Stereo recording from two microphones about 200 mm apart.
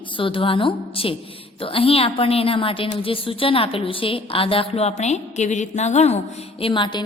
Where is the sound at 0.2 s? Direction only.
25° left (ahead or behind).